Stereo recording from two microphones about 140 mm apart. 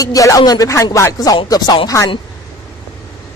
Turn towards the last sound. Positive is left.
turn(degrees=30)  # may be behind; listen again after turning